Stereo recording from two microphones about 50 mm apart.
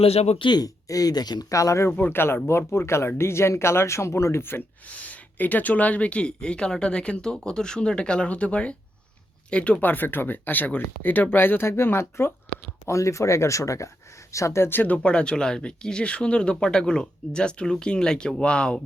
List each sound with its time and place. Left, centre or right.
0.9 s speech: left
2.0 s speech: left
4.9 s speech: left
9.8 s speech: left
12.8 s speech: left
14.8 s speech: left